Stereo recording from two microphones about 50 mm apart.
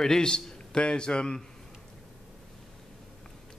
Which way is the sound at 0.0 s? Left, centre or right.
Centre.